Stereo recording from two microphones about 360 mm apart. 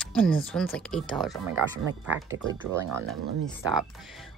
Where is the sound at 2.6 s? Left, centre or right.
Centre.